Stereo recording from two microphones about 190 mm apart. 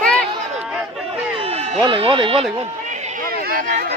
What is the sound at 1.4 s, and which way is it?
Speech, 30° right (ahead or behind).